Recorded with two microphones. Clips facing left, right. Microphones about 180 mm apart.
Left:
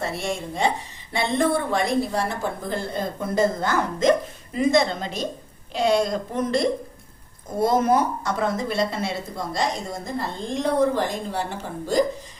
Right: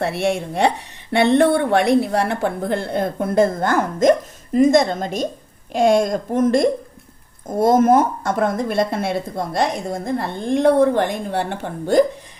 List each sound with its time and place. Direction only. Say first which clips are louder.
0.0 s a woman's voice: right 7 dB; 65° right (ahead or behind)